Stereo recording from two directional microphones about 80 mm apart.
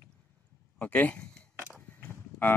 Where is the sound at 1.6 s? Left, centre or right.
Left.